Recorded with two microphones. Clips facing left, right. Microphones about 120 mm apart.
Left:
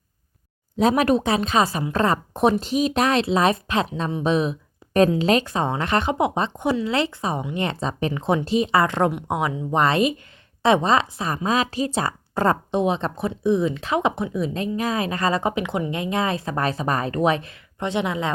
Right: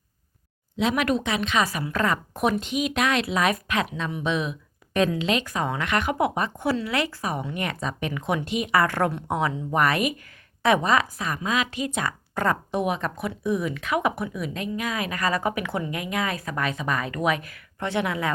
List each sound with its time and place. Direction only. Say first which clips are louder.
0.8 s a woman's voice: left 5 dB; 40° left (ahead or behind); by 18.3 s 20° left (ahead or behind)